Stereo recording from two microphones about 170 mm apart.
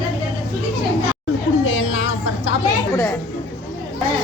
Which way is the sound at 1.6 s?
90° left.